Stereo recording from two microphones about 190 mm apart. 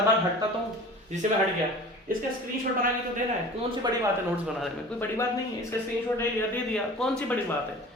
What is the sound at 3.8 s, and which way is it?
Speech, 20° right (ahead or behind).